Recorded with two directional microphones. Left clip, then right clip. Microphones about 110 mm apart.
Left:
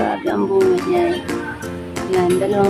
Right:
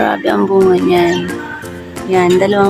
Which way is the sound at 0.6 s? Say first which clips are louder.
Right 5 dB; centre (ahead or behind).